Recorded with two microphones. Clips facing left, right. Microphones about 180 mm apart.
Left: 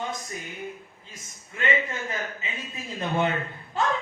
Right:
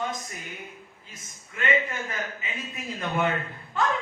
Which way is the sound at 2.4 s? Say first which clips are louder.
Even; 30° left (ahead or behind).